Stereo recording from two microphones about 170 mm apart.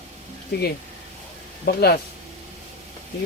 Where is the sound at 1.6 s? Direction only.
65° left (ahead or behind).